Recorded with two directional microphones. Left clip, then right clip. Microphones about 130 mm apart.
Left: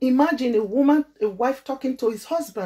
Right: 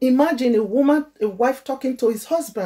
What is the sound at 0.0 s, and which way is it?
Speech, 20° right (ahead or behind).